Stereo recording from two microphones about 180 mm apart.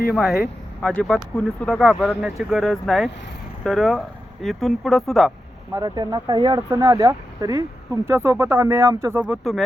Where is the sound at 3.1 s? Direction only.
80° left.